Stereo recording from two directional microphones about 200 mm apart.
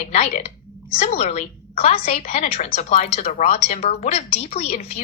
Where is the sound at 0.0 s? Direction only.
35° left (ahead or behind).